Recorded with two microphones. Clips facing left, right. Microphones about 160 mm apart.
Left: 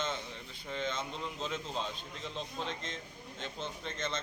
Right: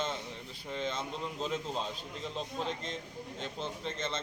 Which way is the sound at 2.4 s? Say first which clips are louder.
Right 3 dB; 35° right (ahead or behind).